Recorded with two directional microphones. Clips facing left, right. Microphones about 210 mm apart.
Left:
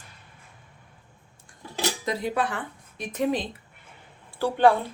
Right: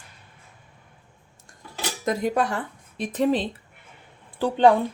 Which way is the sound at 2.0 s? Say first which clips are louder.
Right 6 dB; 45° right (ahead or behind).